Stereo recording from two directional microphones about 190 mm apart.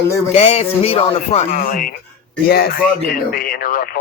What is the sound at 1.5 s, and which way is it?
Speech, 50° left (ahead or behind).